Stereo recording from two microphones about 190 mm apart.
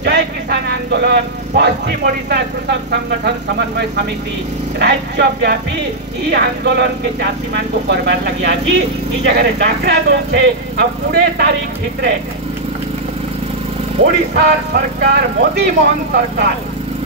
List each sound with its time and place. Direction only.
0.0 s speech: 60° right (ahead or behind)
14.0 s speech: 55° right (ahead or behind)